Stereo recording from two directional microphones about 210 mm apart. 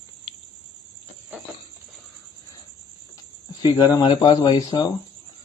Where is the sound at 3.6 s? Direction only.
20° left (ahead or behind).